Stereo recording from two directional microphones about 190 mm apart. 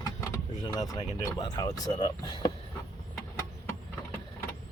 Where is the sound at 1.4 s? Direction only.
20° left (ahead or behind).